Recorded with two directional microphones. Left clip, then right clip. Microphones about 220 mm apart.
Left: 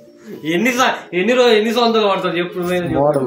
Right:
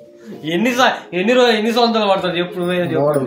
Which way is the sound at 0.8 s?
45° right (ahead or behind).